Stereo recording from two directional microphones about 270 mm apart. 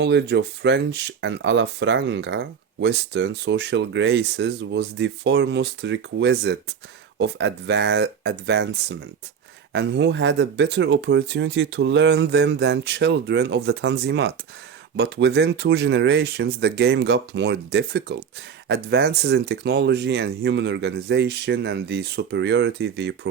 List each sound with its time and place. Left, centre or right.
0.0 s speech: right